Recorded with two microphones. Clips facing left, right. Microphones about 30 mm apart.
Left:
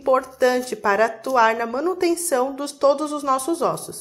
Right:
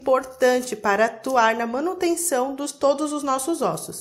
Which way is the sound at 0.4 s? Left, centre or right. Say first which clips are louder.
Even; left.